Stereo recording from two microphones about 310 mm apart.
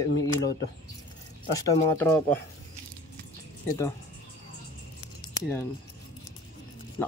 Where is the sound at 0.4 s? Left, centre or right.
Left.